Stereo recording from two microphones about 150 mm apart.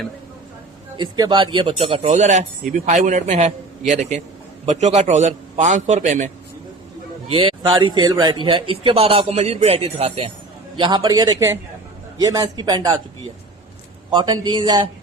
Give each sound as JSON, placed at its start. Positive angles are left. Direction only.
{"t": 0.9, "sound": "speech", "side_deg": -30}
{"t": 7.3, "sound": "a man's voice", "side_deg": -40}
{"t": 14.1, "sound": "a man's voice", "side_deg": -30}